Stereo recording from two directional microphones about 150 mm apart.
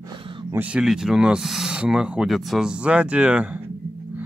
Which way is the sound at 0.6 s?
5° right (ahead or behind).